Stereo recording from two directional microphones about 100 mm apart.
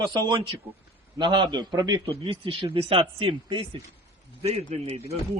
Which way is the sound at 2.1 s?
70° right (ahead or behind).